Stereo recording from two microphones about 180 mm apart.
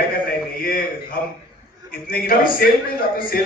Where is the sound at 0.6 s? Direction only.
55° left (ahead or behind).